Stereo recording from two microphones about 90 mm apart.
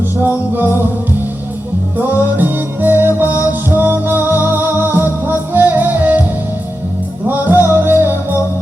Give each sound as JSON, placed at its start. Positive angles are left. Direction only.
{"t": 0.2, "sound": "music", "side_deg": -25}
{"t": 2.0, "sound": "music", "side_deg": -20}
{"t": 7.3, "sound": "music", "side_deg": -20}